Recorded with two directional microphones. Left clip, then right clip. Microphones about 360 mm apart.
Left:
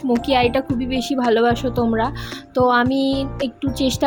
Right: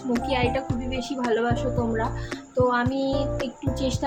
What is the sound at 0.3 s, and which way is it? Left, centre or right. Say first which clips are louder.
Speech: left 8 dB; left.